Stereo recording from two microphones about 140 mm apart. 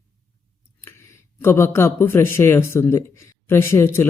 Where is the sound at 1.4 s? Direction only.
15° left (ahead or behind).